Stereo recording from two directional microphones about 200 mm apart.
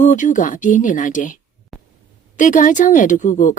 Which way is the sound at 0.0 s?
40° left (ahead or behind).